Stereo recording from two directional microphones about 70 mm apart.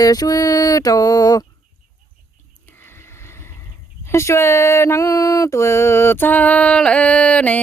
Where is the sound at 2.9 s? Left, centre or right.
Left.